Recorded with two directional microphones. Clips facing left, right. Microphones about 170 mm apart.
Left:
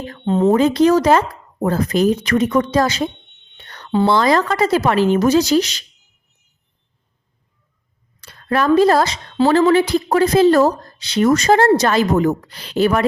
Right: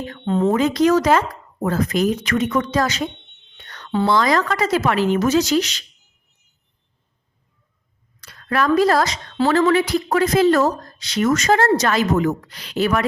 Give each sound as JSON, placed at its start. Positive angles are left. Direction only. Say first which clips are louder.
{"t": 0.3, "sound": "speech", "louder": "left 3 dB", "side_deg": 20}
{"t": 0.5, "sound": "speech", "louder": "left 3 dB", "side_deg": 30}
{"t": 8.2, "sound": "speech", "louder": "left 2 dB", "side_deg": 30}